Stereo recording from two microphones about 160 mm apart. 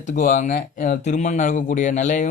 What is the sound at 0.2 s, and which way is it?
Speech, 55° left (ahead or behind).